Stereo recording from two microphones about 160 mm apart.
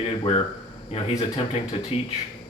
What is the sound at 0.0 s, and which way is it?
A man's voice, 35° left (ahead or behind).